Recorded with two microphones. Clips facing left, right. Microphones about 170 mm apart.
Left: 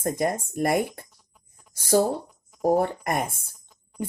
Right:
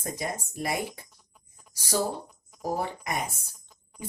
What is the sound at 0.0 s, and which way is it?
Speech, 55° left (ahead or behind).